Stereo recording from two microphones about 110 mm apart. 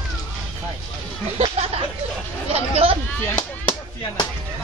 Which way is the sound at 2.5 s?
65° right (ahead or behind).